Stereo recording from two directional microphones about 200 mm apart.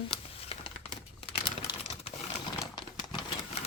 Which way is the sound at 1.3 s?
30° left (ahead or behind).